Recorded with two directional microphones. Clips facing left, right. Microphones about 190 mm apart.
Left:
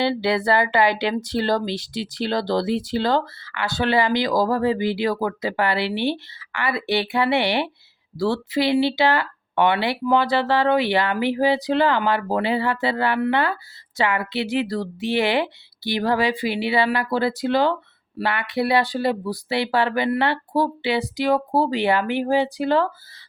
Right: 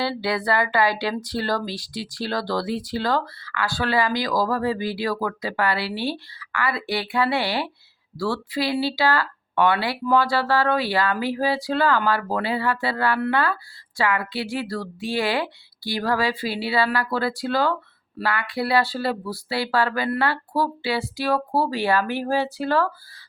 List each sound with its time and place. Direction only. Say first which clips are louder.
0.0 s speech: left 4 dB; 25° left (ahead or behind)